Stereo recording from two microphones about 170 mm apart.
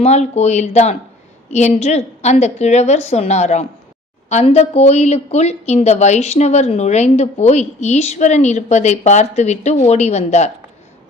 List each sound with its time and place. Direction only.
0.0 s a woman's voice: 40° left (ahead or behind)